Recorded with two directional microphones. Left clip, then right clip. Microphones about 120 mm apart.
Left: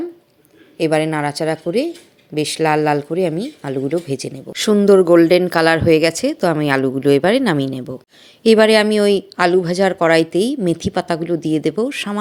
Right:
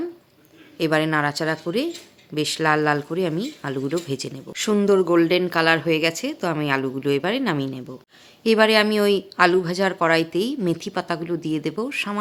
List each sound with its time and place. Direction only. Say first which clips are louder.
0.8 s speech: left 3 dB; 20° left (ahead or behind)
4.5 s speech: left 7 dB; 45° left (ahead or behind)
8.4 s a woman's voice: left 6 dB; 40° left (ahead or behind)